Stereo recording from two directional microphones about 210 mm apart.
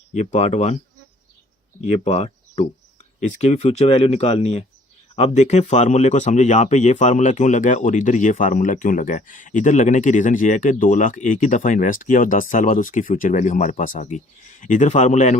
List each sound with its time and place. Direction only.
0.1 s speech: 30° left (ahead or behind)
1.8 s speech: 30° left (ahead or behind)